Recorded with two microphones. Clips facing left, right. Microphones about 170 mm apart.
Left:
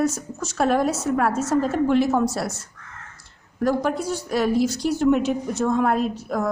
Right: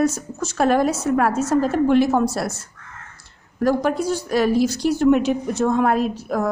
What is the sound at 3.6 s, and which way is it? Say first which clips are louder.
A woman's voice: right 3 dB; 70° right (ahead or behind).